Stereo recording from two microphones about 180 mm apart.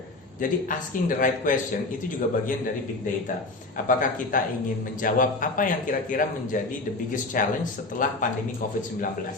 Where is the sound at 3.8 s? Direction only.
45° left (ahead or behind).